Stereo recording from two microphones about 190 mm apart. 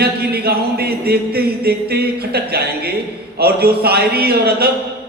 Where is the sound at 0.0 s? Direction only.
55° right (ahead or behind).